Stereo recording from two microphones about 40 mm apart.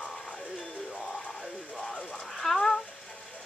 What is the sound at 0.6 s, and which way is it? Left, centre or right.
Music, left.